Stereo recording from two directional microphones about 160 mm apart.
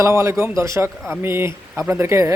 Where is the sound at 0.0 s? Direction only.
20° right (ahead or behind).